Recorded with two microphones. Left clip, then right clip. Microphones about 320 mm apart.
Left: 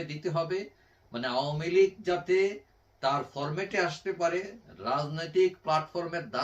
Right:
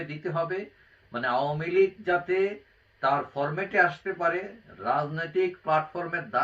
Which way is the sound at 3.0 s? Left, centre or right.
Centre.